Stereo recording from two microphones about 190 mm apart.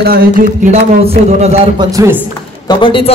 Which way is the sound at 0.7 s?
35° right (ahead or behind).